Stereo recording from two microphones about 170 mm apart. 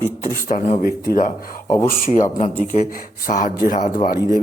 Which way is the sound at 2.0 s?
40° left (ahead or behind).